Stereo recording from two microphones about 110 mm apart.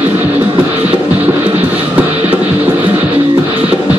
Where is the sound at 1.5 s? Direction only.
60° right (ahead or behind).